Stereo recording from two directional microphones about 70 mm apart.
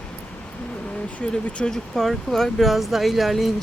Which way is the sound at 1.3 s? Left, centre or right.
Centre.